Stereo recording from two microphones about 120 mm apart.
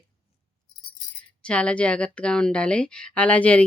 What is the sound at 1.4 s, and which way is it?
Speech, 10° left (ahead or behind).